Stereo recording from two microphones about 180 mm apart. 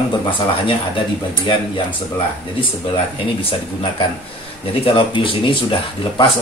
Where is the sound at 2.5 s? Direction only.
30° left (ahead or behind).